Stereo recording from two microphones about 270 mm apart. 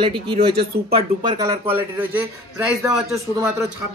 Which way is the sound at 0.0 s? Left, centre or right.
Centre.